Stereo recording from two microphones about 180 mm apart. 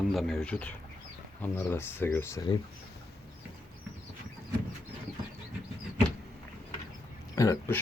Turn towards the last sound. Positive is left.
turn(degrees=15)  # may be behind; listen again after turning